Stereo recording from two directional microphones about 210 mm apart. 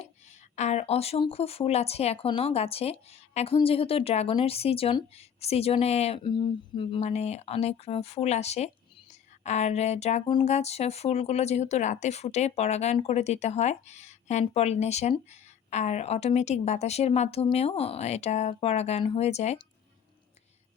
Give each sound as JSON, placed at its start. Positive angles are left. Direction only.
{"t": 0.5, "sound": "speech", "side_deg": 30}